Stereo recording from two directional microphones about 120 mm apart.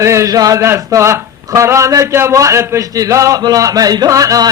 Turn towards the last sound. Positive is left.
turn(degrees=-30)  # may be behind; listen again after turning